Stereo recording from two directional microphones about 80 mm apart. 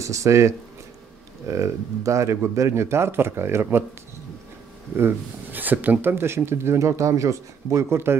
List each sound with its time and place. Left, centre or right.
0.0 s speech: right
4.9 s speech: right